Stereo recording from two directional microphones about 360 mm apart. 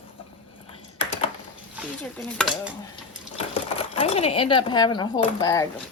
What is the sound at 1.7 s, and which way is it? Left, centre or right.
Stir, centre.